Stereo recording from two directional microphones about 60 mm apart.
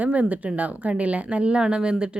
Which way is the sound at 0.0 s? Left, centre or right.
Right.